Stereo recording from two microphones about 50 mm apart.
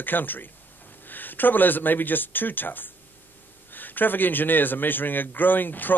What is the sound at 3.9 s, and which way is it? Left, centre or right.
A man's voice, left.